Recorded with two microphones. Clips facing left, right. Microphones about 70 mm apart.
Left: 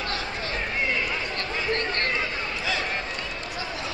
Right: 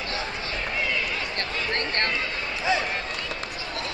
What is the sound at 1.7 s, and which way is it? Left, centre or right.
Chatter, right.